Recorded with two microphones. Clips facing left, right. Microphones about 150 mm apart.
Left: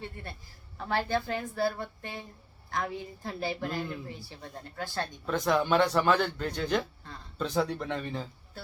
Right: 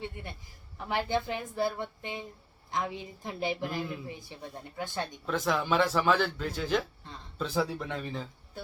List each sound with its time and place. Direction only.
0.0 s a woman's voice: 15° right (ahead or behind)
5.2 s a man's voice: centre (ahead or behind)